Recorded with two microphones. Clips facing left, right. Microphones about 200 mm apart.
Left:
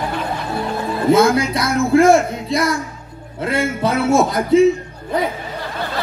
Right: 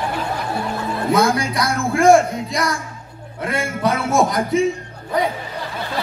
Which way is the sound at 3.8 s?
25° left (ahead or behind).